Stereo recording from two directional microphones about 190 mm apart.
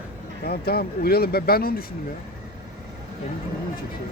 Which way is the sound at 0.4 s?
55° left (ahead or behind).